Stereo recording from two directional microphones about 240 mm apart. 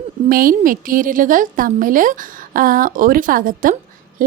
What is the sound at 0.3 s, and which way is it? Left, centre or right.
Speech, right.